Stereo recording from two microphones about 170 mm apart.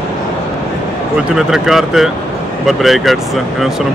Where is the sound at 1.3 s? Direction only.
5° right (ahead or behind).